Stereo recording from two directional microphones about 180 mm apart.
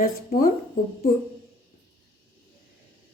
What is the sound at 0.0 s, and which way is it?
Speech, 50° left (ahead or behind).